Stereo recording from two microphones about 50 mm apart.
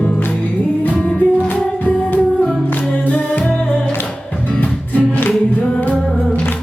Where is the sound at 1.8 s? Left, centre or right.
Left.